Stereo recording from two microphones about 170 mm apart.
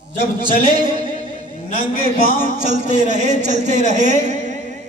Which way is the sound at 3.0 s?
45° right (ahead or behind).